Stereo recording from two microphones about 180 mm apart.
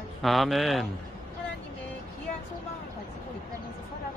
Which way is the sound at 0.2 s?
Centre (ahead or behind).